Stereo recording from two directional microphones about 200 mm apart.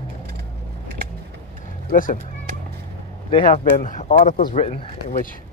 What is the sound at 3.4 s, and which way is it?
Speech, 40° left (ahead or behind).